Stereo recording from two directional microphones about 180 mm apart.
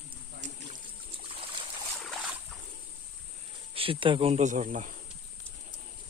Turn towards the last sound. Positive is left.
turn(degrees=-45)  # may be behind; listen again after turning